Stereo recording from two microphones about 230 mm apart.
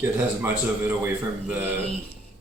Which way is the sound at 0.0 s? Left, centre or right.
Centre.